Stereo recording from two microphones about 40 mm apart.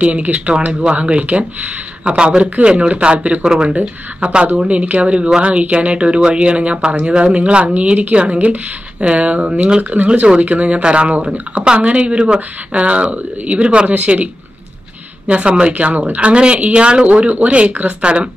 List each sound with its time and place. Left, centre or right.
0.0 s speech: right
15.7 s speech: right